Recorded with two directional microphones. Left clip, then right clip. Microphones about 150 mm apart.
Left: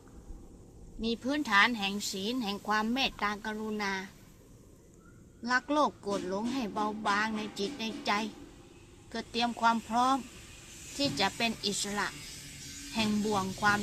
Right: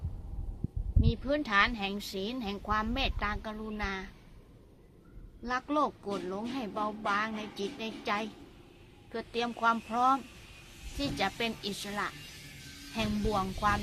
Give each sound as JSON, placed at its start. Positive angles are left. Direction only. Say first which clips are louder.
{"t": 1.0, "sound": "speech", "louder": "even", "side_deg": -15}
{"t": 5.4, "sound": "speech", "louder": "left 2 dB", "side_deg": -15}